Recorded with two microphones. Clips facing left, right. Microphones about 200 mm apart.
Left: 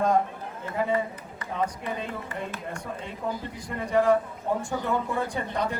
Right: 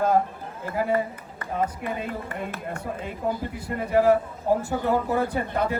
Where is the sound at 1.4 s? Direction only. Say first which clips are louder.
Right 3 dB; 55° right (ahead or behind).